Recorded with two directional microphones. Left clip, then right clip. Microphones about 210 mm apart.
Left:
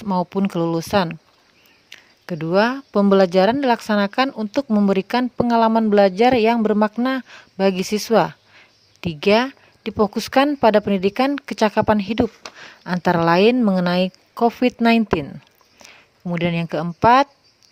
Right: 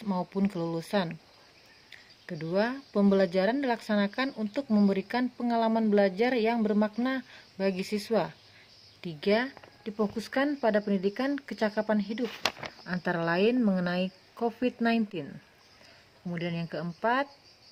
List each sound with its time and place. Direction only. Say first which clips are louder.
0.0 s speech: left 10 dB; 40° left (ahead or behind)
2.2 s speech: left 11 dB; 45° left (ahead or behind)
12.3 s speech: right 7 dB; 35° right (ahead or behind)
12.8 s speech: left 13 dB; 45° left (ahead or behind)